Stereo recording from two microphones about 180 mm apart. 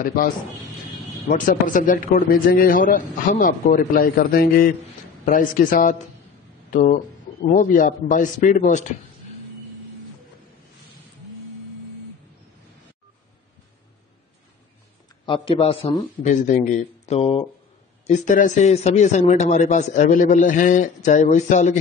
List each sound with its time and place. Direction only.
0.0 s a man's voice: 50° left (ahead or behind)
1.3 s a man's voice: 50° left (ahead or behind)
15.2 s a man's voice: 30° left (ahead or behind)
16.3 s a man's voice: 45° left (ahead or behind)